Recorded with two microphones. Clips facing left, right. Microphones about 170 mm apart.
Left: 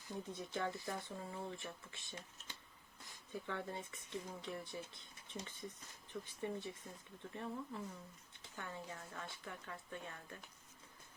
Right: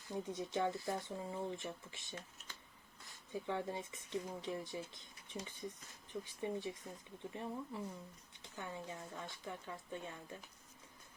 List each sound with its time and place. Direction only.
0.1 s speech: 20° right (ahead or behind)
3.4 s speech: 15° right (ahead or behind)